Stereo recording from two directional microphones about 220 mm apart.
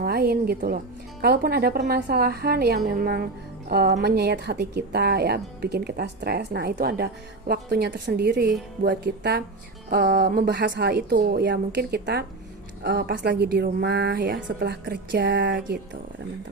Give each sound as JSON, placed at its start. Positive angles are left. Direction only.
{"t": 0.0, "sound": "a woman's voice", "side_deg": -45}